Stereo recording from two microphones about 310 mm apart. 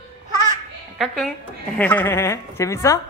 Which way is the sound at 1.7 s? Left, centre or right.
Centre.